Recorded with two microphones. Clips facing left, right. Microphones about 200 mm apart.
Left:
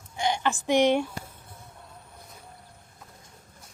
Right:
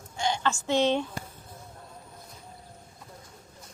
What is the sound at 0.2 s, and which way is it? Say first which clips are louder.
Speech: left 1 dB; 15° left (ahead or behind).